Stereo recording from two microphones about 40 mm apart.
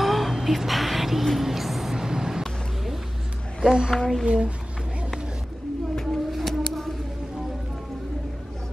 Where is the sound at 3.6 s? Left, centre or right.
Centre.